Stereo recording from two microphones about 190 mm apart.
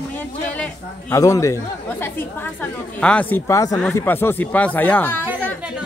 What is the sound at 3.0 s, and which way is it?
Speech, 5° left (ahead or behind).